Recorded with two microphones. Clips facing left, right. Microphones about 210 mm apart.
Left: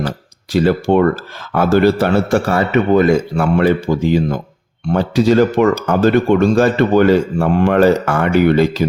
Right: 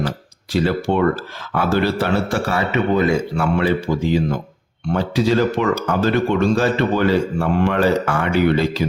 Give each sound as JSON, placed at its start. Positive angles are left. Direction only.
{"t": 0.5, "sound": "speech", "side_deg": 45}